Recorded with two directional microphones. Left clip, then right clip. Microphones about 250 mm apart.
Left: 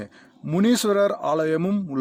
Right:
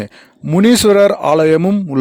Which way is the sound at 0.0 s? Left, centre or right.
Right.